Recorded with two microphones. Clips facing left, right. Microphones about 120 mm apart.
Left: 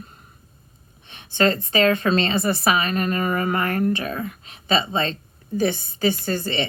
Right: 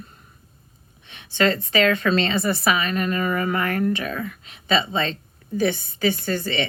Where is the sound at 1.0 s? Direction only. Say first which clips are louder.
Left 1 dB; 35° left (ahead or behind).